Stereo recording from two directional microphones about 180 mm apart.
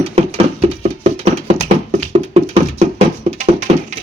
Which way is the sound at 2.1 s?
35° right (ahead or behind).